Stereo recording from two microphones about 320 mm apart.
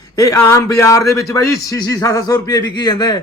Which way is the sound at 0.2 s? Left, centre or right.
Centre.